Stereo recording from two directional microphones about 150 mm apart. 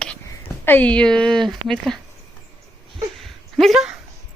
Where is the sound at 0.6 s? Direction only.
10° left (ahead or behind).